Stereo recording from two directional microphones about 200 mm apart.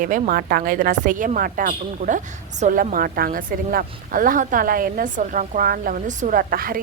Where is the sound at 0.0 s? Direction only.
45° right (ahead or behind).